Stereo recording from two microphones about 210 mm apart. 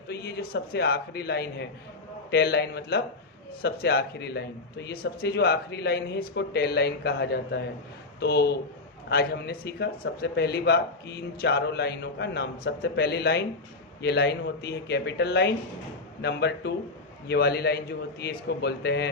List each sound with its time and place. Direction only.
0.1 s speech: 50° left (ahead or behind)